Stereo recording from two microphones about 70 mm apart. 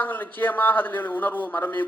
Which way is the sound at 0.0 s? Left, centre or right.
Left.